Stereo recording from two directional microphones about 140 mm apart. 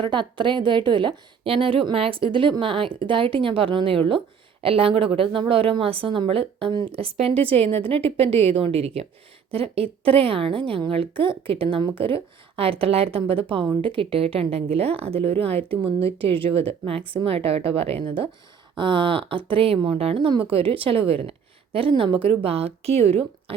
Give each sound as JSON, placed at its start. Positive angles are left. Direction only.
{"t": 0.0, "sound": "a woman's voice", "side_deg": -35}
{"t": 16.4, "sound": "a woman's voice", "side_deg": -45}